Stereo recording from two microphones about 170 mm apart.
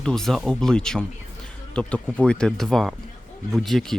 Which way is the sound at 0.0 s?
5° left (ahead or behind).